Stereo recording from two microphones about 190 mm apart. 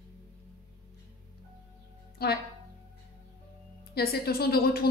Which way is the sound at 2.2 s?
55° left (ahead or behind).